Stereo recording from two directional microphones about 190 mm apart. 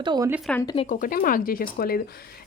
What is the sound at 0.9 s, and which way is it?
Speech, 50° left (ahead or behind).